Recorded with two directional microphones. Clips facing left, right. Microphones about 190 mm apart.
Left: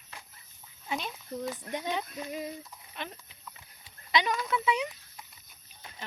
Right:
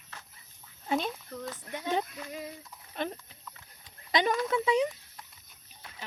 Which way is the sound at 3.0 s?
45° right (ahead or behind).